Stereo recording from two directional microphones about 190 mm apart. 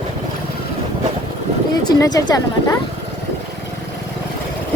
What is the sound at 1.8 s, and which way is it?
Speech, 20° left (ahead or behind).